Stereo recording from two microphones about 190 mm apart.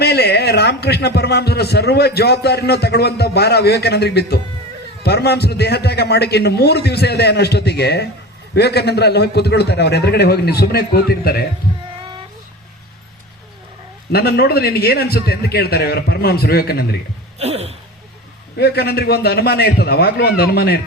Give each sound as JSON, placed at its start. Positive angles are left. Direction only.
{"t": 0.0, "sound": "a man's voice", "side_deg": 60}
{"t": 14.1, "sound": "a man's voice", "side_deg": 55}
{"t": 17.4, "sound": "basketball bounce", "side_deg": -35}
{"t": 18.5, "sound": "a man's voice", "side_deg": 60}